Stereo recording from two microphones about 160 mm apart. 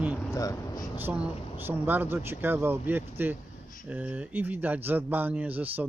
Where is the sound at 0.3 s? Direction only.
20° left (ahead or behind).